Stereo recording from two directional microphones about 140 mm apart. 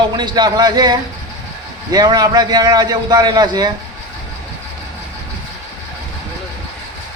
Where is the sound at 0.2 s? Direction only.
30° right (ahead or behind).